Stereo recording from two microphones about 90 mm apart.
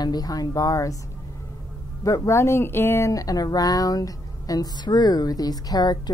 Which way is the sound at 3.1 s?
40° left (ahead or behind).